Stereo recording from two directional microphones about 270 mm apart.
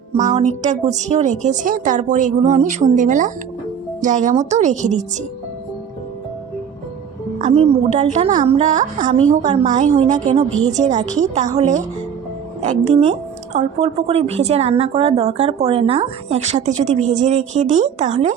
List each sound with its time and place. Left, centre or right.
0.3 s a woman's voice: right
7.3 s a woman's voice: right